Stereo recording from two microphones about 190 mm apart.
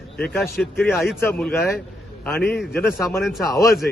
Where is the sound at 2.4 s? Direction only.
60° left (ahead or behind).